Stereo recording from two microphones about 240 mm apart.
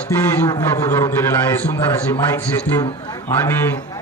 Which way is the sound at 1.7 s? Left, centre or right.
Centre.